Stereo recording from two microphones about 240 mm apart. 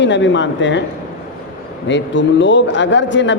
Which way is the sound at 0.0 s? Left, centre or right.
Left.